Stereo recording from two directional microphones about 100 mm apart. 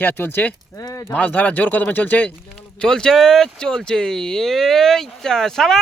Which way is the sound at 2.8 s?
5° left (ahead or behind).